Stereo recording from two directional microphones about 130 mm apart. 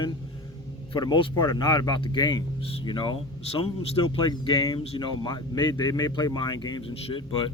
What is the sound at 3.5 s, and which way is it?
Speech, 45° left (ahead or behind).